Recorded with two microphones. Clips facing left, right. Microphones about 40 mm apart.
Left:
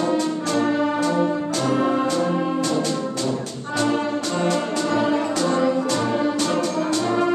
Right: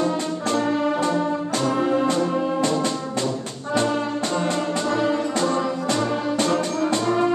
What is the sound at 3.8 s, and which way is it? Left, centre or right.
Brass instrument, centre.